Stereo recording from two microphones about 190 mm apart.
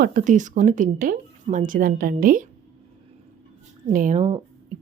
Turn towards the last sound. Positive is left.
turn(degrees=-35)  # may be behind; listen again after turning